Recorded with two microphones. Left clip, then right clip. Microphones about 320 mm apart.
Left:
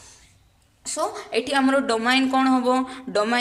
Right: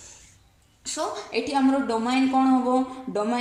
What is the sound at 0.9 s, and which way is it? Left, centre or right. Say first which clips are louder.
A woman's voice: left 3 dB; left.